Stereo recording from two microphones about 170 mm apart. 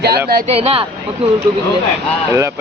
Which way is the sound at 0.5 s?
35° right (ahead or behind).